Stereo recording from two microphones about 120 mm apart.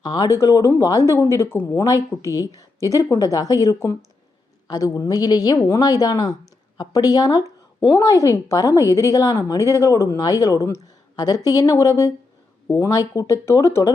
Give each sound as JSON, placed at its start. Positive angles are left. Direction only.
{"t": 0.0, "sound": "speech", "side_deg": 35}
{"t": 0.3, "sound": "a woman's voice", "side_deg": 25}
{"t": 13.1, "sound": "a woman's voice", "side_deg": 25}